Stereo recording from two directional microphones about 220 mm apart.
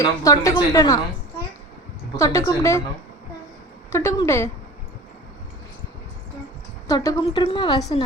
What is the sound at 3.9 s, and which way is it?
Speech, 10° left (ahead or behind).